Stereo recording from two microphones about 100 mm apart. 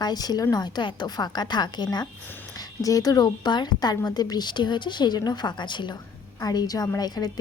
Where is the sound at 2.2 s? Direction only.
20° left (ahead or behind).